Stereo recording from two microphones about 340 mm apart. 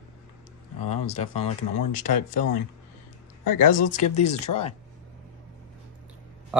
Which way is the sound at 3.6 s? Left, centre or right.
Left.